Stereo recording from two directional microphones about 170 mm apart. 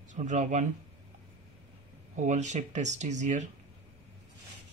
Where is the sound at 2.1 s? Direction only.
45° right (ahead or behind).